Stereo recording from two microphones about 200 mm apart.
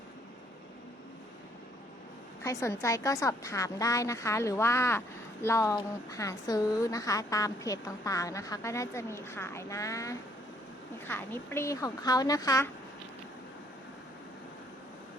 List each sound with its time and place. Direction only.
2.4 s a woman's voice: 15° left (ahead or behind)